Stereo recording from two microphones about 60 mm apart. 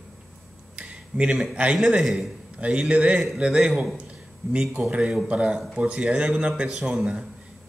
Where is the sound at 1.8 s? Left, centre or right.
Centre.